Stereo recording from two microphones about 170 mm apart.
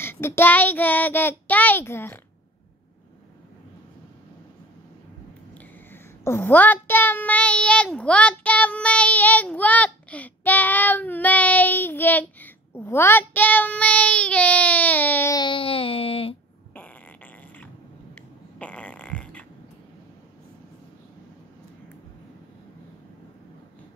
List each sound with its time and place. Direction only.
0.0 s child singing: 15° left (ahead or behind)
5.9 s child singing: 15° left (ahead or behind)
15.3 s a sound: 30° left (ahead or behind)
16.7 s fart: 10° left (ahead or behind)